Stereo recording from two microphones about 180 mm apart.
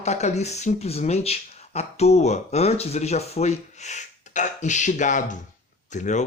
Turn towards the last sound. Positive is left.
turn(degrees=40)  # may be behind; listen again after turning